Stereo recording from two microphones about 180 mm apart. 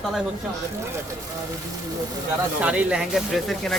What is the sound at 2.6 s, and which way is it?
Speech, 5° right (ahead or behind).